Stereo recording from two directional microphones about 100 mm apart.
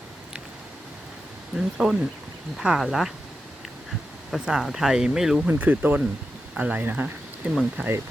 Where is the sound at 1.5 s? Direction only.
5° right (ahead or behind).